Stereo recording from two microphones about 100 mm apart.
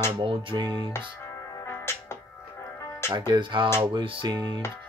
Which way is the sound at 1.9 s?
25° left (ahead or behind).